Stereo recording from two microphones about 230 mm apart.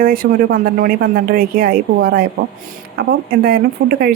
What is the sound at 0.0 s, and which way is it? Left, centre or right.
Speech, right.